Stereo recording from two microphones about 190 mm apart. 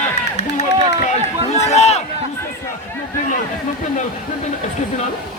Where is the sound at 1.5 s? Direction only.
35° left (ahead or behind).